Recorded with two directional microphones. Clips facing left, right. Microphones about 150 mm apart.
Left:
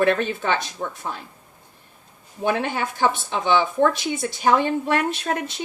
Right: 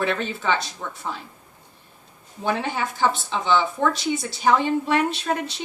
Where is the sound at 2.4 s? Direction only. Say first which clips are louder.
Left 2 dB; 55° left (ahead or behind).